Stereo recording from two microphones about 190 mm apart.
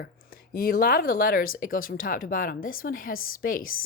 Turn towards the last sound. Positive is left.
turn(degrees=50)  # may be behind; listen again after turning